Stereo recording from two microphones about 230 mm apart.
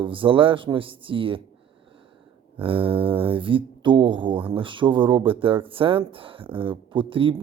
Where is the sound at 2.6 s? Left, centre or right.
Right.